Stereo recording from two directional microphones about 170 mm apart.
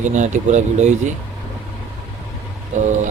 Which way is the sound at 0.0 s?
45° right (ahead or behind).